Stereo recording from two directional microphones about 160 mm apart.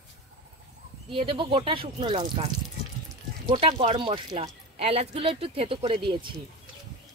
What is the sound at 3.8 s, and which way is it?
Speech, 35° right (ahead or behind).